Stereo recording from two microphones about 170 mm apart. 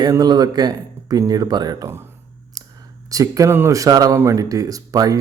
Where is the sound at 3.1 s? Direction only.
20° right (ahead or behind).